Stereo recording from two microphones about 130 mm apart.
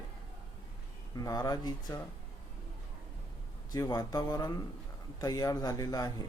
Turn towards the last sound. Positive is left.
turn(degrees=30)  # may be behind; listen again after turning